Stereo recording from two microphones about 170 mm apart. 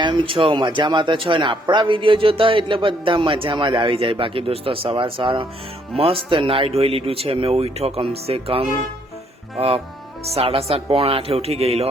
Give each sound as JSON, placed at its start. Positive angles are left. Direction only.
{"t": 0.0, "sound": "a man's voice", "side_deg": -30}